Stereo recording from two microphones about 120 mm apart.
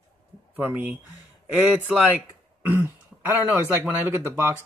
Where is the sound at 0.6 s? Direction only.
15° right (ahead or behind).